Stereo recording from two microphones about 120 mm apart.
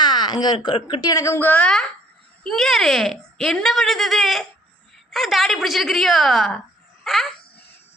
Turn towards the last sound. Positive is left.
turn(degrees=0)  # may be behind; listen again after turning